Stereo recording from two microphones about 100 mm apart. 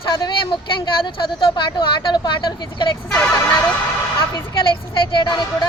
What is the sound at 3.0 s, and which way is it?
Speech, 5° left (ahead or behind).